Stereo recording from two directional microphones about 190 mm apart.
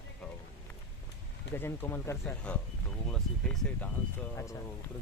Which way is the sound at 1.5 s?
10° left (ahead or behind).